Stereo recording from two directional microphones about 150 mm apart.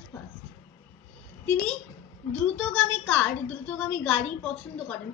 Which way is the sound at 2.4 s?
10° left (ahead or behind).